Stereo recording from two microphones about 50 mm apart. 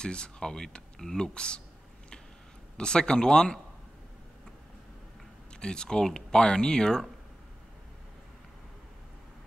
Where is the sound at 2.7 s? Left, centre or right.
Centre.